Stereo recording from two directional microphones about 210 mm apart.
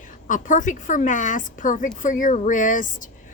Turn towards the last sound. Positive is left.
turn(degrees=40)  # may be behind; listen again after turning